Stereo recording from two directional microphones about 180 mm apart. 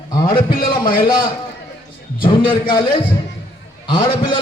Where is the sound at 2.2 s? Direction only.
25° left (ahead or behind).